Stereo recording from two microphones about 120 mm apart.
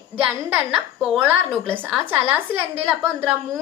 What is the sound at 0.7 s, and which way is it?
A woman's voice, 5° right (ahead or behind).